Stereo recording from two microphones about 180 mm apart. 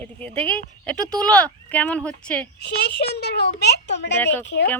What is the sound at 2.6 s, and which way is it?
A child's voice, 65° left (ahead or behind).